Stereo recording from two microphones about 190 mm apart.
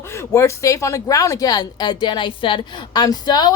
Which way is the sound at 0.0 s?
15° left (ahead or behind).